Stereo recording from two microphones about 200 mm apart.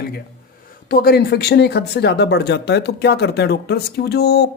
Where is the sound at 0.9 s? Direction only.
50° left (ahead or behind).